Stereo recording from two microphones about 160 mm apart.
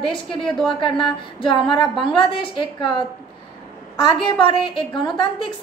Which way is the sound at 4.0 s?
30° left (ahead or behind).